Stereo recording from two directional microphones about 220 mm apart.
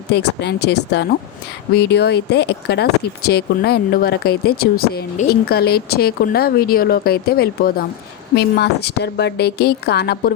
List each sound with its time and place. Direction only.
0.1 s speech: 50° left (ahead or behind)